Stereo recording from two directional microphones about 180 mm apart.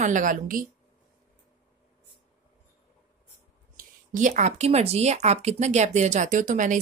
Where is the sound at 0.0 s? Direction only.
45° right (ahead or behind).